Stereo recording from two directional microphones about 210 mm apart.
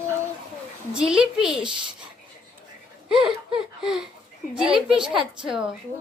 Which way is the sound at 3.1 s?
5° right (ahead or behind).